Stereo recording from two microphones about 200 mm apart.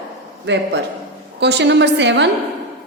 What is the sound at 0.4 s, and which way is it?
A woman's voice, 60° right (ahead or behind).